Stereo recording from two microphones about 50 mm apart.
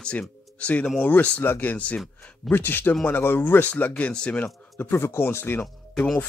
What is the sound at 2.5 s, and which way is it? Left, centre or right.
Speech, left.